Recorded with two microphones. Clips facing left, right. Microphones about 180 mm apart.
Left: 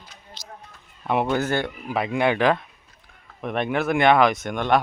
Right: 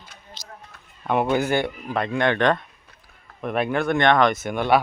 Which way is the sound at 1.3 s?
15° right (ahead or behind).